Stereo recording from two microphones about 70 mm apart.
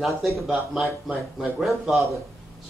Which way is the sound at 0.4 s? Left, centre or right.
Centre.